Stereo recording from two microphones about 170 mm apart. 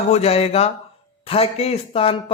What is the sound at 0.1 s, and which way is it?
A man's voice, 35° left (ahead or behind).